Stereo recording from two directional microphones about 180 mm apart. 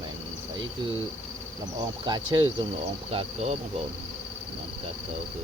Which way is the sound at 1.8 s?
25° right (ahead or behind).